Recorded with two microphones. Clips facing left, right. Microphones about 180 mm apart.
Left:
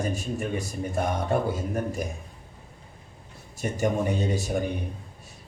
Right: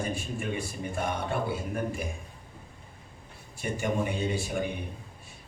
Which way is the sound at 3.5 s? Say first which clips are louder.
Left 4 dB; 40° left (ahead or behind).